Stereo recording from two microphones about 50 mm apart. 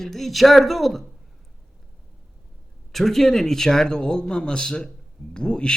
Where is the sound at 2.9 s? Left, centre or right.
Centre.